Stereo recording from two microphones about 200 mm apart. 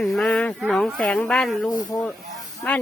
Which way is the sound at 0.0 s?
Centre (ahead or behind).